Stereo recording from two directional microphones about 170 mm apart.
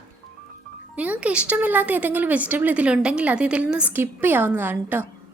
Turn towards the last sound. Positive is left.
turn(degrees=-10)  # may be behind; listen again after turning